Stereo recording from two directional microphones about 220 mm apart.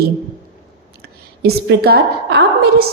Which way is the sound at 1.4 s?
45° right (ahead or behind).